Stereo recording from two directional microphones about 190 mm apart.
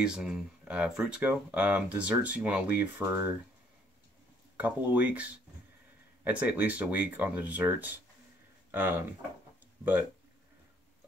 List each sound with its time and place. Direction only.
0.0 s speech: 5° right (ahead or behind)
4.6 s speech: 10° right (ahead or behind)